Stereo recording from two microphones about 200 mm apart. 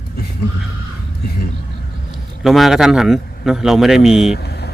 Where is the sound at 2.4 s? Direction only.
Centre (ahead or behind).